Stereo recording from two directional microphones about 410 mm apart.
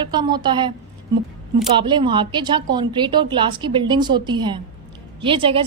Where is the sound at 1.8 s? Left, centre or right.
Centre.